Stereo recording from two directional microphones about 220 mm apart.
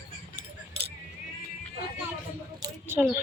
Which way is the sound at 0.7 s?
30° right (ahead or behind).